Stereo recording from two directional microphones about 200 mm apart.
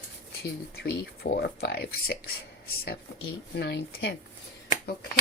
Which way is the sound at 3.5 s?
55° left (ahead or behind).